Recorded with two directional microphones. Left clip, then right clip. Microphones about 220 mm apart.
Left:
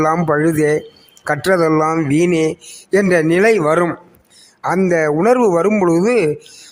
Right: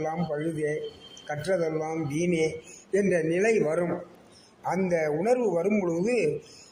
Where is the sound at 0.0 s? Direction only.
50° left (ahead or behind).